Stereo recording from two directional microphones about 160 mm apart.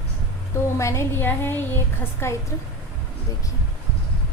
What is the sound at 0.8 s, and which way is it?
A woman's voice, 20° left (ahead or behind).